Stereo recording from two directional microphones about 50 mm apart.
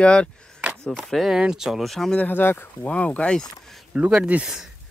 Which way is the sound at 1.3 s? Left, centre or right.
Centre.